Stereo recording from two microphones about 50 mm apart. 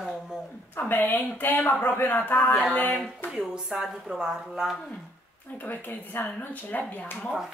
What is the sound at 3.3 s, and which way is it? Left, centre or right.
Speech, centre.